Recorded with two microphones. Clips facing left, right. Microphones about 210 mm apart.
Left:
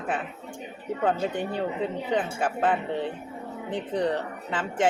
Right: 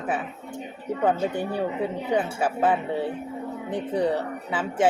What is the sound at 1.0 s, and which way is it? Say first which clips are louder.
Speech: right 2 dB; 10° right (ahead or behind).